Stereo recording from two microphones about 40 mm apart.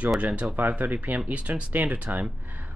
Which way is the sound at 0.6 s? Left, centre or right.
Right.